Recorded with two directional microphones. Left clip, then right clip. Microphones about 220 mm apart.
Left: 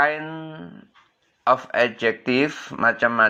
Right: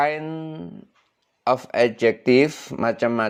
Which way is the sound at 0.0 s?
55° right (ahead or behind).